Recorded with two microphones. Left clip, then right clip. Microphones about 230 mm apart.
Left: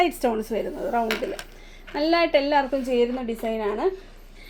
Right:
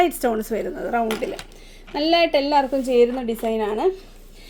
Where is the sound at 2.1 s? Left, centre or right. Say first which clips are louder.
Right 3 dB; right.